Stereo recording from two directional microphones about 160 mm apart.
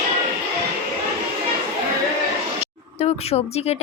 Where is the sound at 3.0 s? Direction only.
40° left (ahead or behind).